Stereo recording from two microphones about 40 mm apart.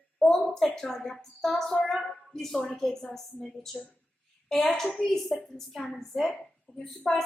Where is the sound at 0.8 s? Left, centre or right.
Centre.